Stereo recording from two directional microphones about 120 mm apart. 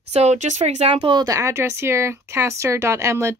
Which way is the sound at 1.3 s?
25° right (ahead or behind).